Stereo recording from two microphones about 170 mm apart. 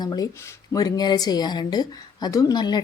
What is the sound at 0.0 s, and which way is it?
Speech, 25° left (ahead or behind).